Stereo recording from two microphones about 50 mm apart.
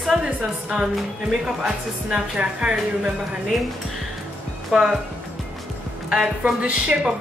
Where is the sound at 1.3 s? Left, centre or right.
Centre.